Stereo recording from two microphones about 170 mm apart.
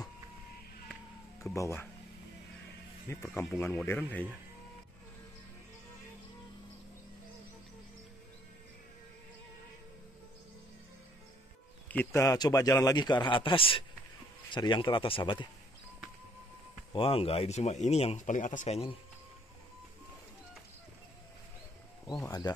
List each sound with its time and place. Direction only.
1.5 s speech: 15° left (ahead or behind)
3.1 s speech: 15° left (ahead or behind)
11.9 s speech: 15° left (ahead or behind); by 15.4 s 30° left (ahead or behind)
16.9 s speech: 35° left (ahead or behind)
22.2 s speech: 20° left (ahead or behind)